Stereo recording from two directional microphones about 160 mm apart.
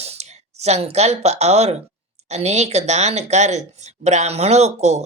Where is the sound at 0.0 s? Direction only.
40° right (ahead or behind).